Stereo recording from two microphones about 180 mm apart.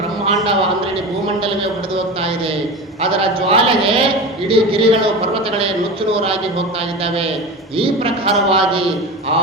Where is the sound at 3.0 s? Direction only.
30° right (ahead or behind).